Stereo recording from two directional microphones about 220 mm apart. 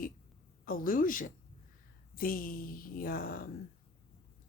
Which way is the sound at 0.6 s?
40° left (ahead or behind).